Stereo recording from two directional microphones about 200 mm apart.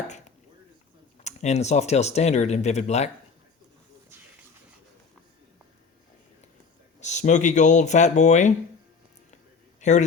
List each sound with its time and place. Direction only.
1.2 s speech: 35° left (ahead or behind)
7.0 s speech: 35° left (ahead or behind)
9.8 s a man's voice: 35° left (ahead or behind)